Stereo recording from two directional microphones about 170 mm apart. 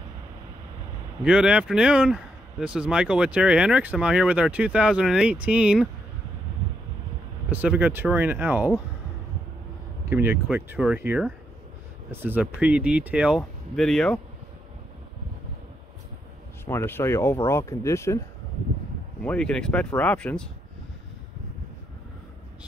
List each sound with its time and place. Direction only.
1.2 s speech: 5° right (ahead or behind)
7.5 s speech: 10° right (ahead or behind)
10.0 s speech: 10° right (ahead or behind)
16.6 s speech: 15° left (ahead or behind)
19.2 s speech: 5° left (ahead or behind)